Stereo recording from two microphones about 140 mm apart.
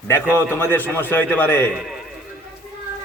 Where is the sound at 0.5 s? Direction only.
15° left (ahead or behind).